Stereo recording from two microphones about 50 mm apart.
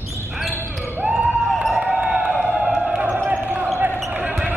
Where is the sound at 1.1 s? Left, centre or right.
Centre.